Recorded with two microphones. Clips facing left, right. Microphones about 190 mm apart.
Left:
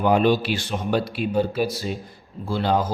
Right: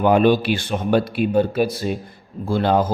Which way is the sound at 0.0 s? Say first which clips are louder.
Right 3 dB; 55° right (ahead or behind).